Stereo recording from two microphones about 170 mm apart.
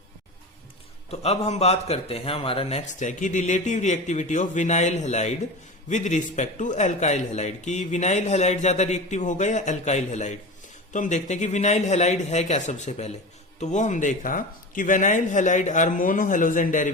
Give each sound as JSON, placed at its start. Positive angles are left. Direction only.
{"t": 1.1, "sound": "a man's voice", "side_deg": 35}